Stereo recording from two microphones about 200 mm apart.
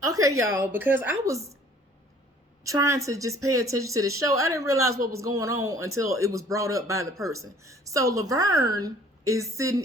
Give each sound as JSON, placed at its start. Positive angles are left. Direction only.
{"t": 0.0, "sound": "speech", "side_deg": -15}
{"t": 2.6, "sound": "speech", "side_deg": -15}